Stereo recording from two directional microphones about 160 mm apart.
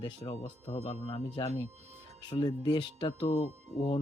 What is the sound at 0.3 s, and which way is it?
Speech, 35° left (ahead or behind).